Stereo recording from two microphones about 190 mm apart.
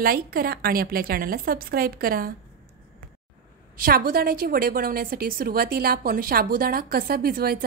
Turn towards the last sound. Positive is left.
turn(degrees=-50)  # may be behind; listen again after turning